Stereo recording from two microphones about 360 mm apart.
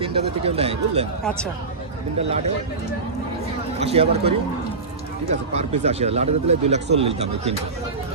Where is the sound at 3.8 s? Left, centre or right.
Centre.